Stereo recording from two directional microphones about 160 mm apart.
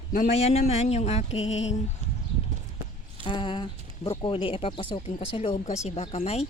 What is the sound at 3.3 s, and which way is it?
Speech, 30° left (ahead or behind).